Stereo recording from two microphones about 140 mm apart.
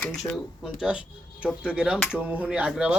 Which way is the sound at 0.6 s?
5° right (ahead or behind).